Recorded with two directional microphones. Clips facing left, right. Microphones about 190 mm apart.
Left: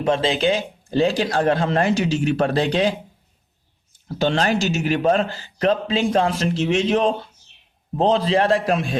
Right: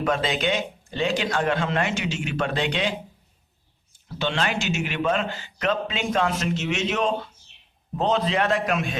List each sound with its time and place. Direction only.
0.0 s a man's voice: 30° left (ahead or behind)
4.2 s a man's voice: 40° left (ahead or behind)